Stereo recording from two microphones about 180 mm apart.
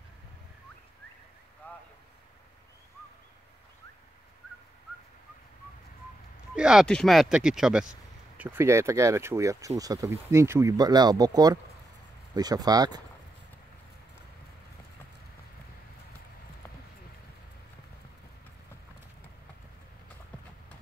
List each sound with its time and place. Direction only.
1.6 s vehicle: 10° left (ahead or behind)
6.5 s speech: 5° right (ahead or behind); by 13.0 s 20° right (ahead or behind)